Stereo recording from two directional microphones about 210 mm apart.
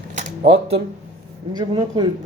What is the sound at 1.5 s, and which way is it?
Speech, 20° right (ahead or behind).